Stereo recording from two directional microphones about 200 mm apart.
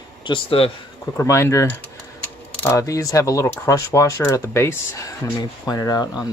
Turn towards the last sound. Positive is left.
turn(degrees=20)  # may be behind; listen again after turning